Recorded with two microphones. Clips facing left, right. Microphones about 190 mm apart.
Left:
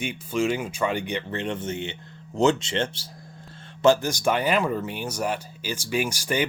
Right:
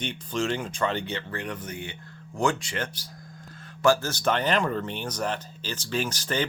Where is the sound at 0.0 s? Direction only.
10° left (ahead or behind).